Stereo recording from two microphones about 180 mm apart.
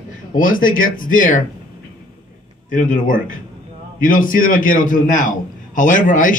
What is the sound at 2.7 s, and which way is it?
A man's voice, 45° left (ahead or behind).